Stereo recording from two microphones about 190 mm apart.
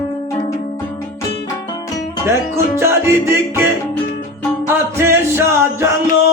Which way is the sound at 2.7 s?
15° right (ahead or behind).